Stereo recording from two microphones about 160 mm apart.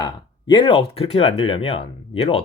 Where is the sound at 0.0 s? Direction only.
30° left (ahead or behind).